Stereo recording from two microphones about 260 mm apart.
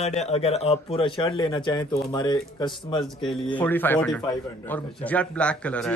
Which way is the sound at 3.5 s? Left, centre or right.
Centre.